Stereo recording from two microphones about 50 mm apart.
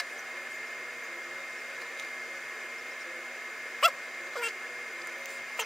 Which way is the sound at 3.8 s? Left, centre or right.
Centre.